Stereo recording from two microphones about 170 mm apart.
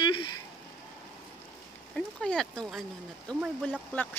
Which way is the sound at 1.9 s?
5° left (ahead or behind).